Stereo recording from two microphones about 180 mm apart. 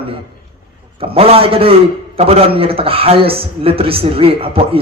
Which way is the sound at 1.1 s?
35° right (ahead or behind).